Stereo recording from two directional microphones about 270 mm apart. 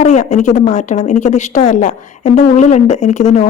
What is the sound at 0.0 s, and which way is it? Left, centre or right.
A woman's voice, left.